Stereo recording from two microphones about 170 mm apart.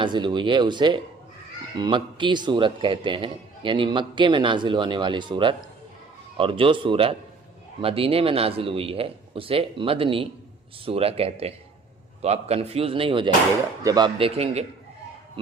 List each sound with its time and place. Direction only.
0.0 s a man's voice: 25° right (ahead or behind)